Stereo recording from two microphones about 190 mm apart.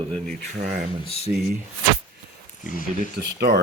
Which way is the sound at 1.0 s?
30° left (ahead or behind).